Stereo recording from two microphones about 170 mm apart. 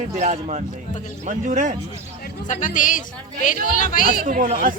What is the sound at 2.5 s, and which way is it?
Speech, 50° left (ahead or behind).